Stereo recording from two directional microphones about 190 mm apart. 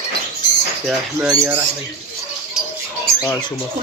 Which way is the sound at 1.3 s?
15° right (ahead or behind).